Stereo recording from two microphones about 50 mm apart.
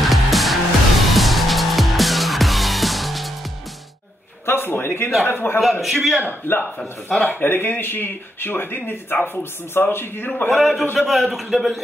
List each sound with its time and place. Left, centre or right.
0.0 s music: centre
4.5 s a sound: left
5.2 s speech: left
5.6 s a man's voice: centre
6.5 s speech: left
7.2 s speech: left
10.5 s a man's voice: centre